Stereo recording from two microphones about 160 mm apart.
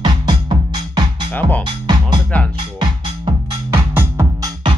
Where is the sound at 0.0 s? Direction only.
30° right (ahead or behind).